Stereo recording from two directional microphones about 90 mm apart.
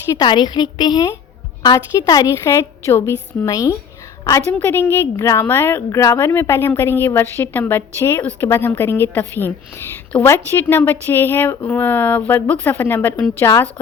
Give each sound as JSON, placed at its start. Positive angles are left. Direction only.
{"t": 0.2, "sound": "a woman's voice", "side_deg": 55}
{"t": 2.4, "sound": "a woman's voice", "side_deg": 30}
{"t": 4.4, "sound": "speech", "side_deg": 25}
{"t": 5.1, "sound": "a woman's voice", "side_deg": 35}
{"t": 5.5, "sound": "speech", "side_deg": 25}